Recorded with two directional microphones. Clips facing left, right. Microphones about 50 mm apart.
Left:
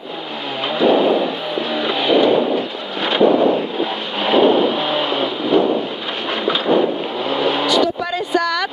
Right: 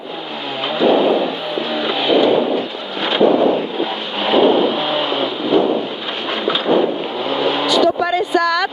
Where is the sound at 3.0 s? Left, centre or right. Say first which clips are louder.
Even; right.